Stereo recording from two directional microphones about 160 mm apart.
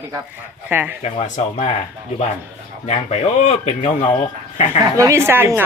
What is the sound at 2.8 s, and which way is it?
Speech, 45° left (ahead or behind).